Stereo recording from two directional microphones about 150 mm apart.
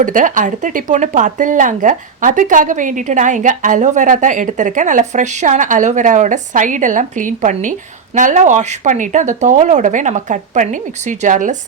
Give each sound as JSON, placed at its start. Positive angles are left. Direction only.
{"t": 0.0, "sound": "speech", "side_deg": -60}